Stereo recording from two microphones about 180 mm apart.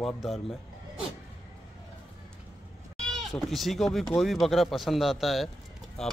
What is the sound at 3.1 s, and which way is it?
Speech, centre (ahead or behind).